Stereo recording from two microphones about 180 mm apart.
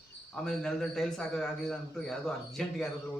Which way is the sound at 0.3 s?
5° left (ahead or behind).